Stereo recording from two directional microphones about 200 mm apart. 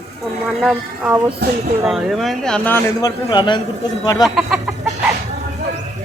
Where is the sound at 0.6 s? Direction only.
10° right (ahead or behind); by 3.1 s 10° left (ahead or behind).